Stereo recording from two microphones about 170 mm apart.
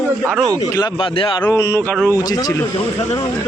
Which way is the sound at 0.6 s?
25° left (ahead or behind).